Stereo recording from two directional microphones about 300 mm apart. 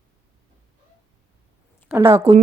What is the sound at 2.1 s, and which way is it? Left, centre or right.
Speech, centre.